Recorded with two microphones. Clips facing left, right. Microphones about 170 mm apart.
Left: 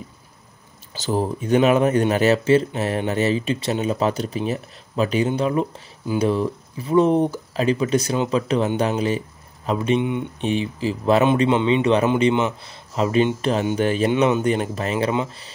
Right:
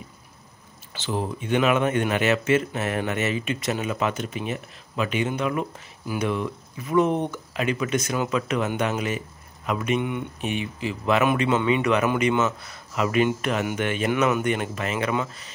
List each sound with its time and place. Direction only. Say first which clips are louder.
0.9 s speech: left 5 dB; 40° left (ahead or behind)